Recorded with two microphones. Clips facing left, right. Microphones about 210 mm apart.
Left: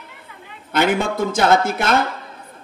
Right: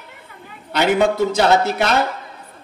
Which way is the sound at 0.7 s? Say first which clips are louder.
Right 2 dB; 50° left (ahead or behind).